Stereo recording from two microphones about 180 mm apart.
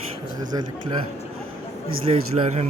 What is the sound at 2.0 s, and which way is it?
Speech, 35° right (ahead or behind).